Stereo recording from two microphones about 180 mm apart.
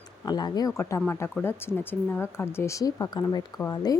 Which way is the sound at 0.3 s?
20° left (ahead or behind).